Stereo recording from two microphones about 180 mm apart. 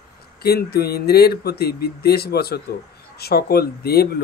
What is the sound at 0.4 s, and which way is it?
Speech, 60° left (ahead or behind).